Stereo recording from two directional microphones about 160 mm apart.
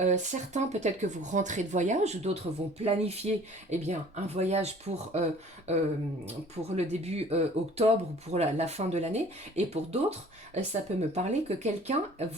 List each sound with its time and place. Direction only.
0.0 s speech: 45° right (ahead or behind)